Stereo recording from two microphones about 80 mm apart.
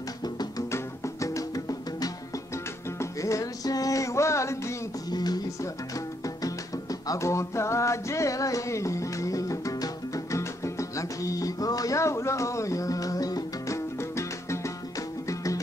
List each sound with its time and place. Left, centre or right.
0.2 s music: left
0.7 s music: left
2.5 s music: left
5.1 s music: left
5.6 s music: left